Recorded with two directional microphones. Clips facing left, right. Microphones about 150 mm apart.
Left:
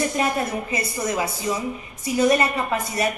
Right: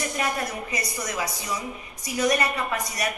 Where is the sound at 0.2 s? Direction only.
25° left (ahead or behind).